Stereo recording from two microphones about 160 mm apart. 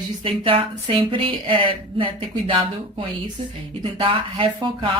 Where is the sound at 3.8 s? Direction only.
35° right (ahead or behind).